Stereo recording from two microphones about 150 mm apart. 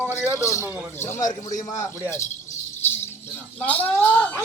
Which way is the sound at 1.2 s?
60° left (ahead or behind).